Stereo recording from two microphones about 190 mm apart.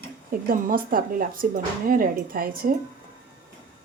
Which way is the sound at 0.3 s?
50° right (ahead or behind).